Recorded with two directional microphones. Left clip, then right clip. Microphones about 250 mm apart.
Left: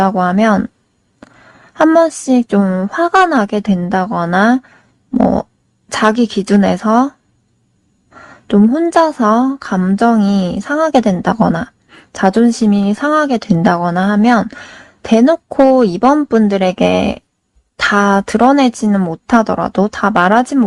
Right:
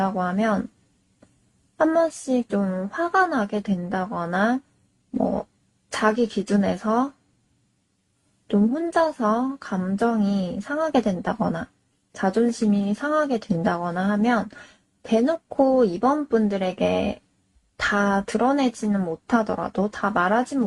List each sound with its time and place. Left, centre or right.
0.0 s speech: left
1.8 s speech: left
8.4 s speech: left